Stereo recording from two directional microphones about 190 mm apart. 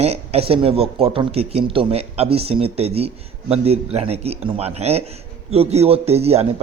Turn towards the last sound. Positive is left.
turn(degrees=-30)  # may be behind; listen again after turning